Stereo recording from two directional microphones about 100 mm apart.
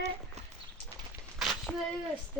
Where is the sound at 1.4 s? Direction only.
Centre (ahead or behind).